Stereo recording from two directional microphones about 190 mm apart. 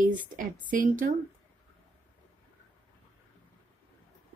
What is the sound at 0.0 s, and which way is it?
Speech, 45° right (ahead or behind).